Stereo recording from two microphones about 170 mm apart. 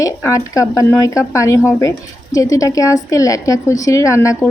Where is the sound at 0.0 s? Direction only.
20° left (ahead or behind).